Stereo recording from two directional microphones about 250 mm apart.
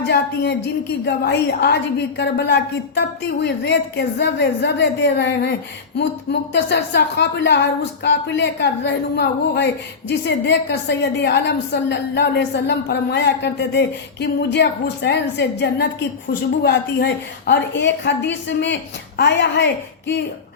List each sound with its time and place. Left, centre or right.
0.0 s a woman's voice: left